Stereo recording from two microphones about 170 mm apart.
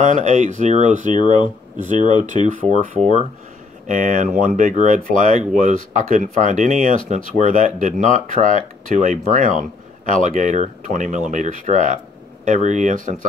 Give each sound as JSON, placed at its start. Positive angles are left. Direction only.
{"t": 0.0, "sound": "speech", "side_deg": -45}
{"t": 1.1, "sound": "speech", "side_deg": 30}
{"t": 1.8, "sound": "speech", "side_deg": -45}
{"t": 3.8, "sound": "speech", "side_deg": -50}